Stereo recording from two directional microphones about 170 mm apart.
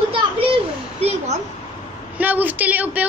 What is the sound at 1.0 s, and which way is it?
Speech, 40° right (ahead or behind).